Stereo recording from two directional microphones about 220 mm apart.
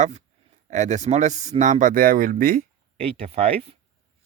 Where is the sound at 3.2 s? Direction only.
30° right (ahead or behind).